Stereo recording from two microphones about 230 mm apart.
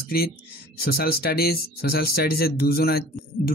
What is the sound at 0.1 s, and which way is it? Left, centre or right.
Speech, left.